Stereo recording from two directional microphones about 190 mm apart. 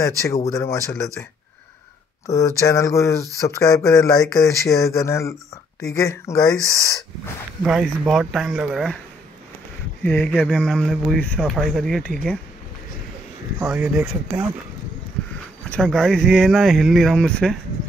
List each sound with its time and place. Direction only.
0.0 s speech: 15° left (ahead or behind)
2.2 s speech: 15° left (ahead or behind)
7.6 s speech: 5° right (ahead or behind)
10.0 s speech: 10° left (ahead or behind)
13.6 s speech: 5° right (ahead or behind)
15.7 s speech: centre (ahead or behind)